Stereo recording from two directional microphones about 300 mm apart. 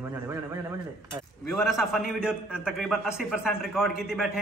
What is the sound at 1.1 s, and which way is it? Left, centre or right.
A man's voice, centre.